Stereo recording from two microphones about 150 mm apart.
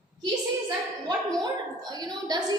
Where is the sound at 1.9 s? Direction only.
25° right (ahead or behind).